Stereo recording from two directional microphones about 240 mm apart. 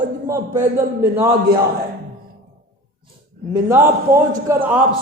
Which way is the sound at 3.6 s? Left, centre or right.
Centre.